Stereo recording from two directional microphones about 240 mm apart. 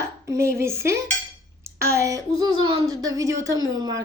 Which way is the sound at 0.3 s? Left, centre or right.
Centre.